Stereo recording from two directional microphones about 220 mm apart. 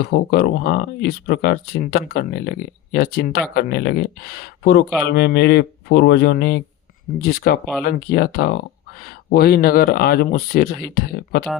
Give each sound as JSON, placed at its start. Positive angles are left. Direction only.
{"t": 0.0, "sound": "speech", "side_deg": 45}